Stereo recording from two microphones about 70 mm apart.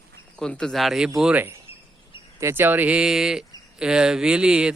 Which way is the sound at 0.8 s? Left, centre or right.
Centre.